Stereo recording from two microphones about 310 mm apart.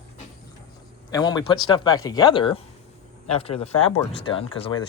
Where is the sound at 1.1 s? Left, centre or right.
Centre.